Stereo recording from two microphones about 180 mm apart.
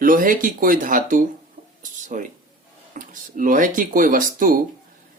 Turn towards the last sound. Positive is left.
turn(degrees=-50)  # may be behind; listen again after turning